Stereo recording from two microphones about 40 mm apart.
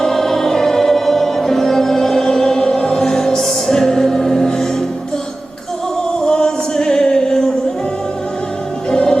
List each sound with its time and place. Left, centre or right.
0.0 s music: centre
6.2 s music: centre
8.9 s music: centre